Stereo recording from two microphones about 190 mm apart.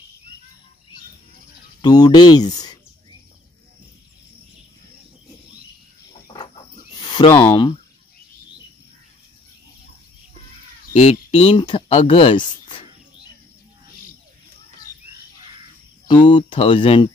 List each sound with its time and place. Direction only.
1.8 s speech: 20° left (ahead or behind)
6.2 s a sound: 25° left (ahead or behind)
7.0 s speech: 25° left (ahead or behind)
10.9 s speech: 35° left (ahead or behind)
16.1 s speech: 25° left (ahead or behind)